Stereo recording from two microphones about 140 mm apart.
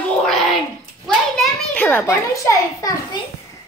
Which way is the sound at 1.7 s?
15° left (ahead or behind).